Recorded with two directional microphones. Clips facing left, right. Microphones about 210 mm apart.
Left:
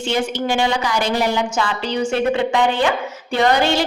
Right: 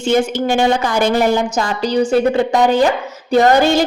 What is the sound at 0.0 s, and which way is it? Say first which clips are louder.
A woman's voice: right 6 dB; 45° right (ahead or behind).